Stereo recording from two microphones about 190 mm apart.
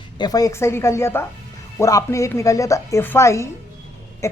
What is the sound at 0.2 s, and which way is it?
A woman's voice, 20° left (ahead or behind).